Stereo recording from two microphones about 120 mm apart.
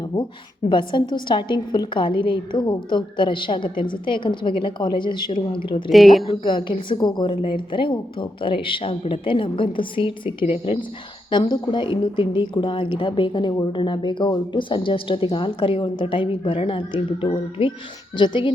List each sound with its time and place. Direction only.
0.7 s a woman's voice: 40° left (ahead or behind)
5.9 s a woman's voice: centre (ahead or behind)
6.4 s a woman's voice: 40° left (ahead or behind)
11.3 s a woman's voice: 40° left (ahead or behind)